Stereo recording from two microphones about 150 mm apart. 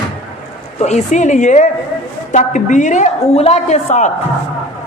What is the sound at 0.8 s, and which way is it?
A woman's voice, 50° left (ahead or behind).